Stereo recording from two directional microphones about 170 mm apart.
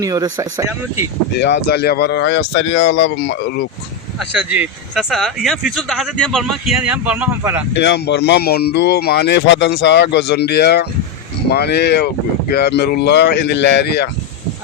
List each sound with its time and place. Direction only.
0.0 s speech: 20° right (ahead or behind)
1.4 s speech: 90° left
4.5 s speech: 5° right (ahead or behind)
7.7 s speech: 85° left